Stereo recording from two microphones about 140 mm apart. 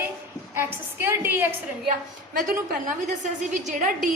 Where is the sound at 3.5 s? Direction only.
65° right (ahead or behind).